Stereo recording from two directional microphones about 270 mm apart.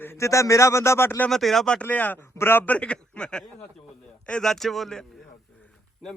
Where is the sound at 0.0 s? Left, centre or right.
Centre.